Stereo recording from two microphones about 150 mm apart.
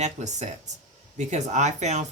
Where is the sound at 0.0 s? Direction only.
50° right (ahead or behind).